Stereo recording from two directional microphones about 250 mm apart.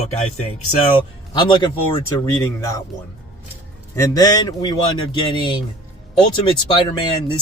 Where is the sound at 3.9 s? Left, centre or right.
Centre.